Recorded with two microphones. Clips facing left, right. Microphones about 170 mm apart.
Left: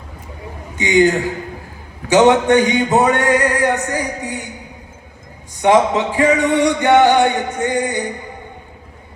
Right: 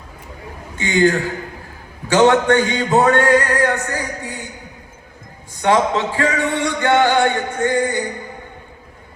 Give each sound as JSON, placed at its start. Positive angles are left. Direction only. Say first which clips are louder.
{"t": 0.8, "sound": "music", "louder": "left 2 dB", "side_deg": 20}
{"t": 5.6, "sound": "music", "louder": "left 3 dB", "side_deg": 20}